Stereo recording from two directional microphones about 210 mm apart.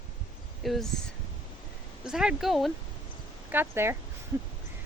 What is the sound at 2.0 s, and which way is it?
Speech, 5° right (ahead or behind).